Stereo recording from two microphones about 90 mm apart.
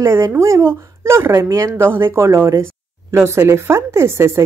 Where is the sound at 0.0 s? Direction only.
30° right (ahead or behind).